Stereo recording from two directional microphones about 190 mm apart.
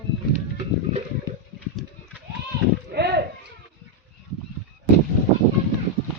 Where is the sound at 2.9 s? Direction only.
60° right (ahead or behind).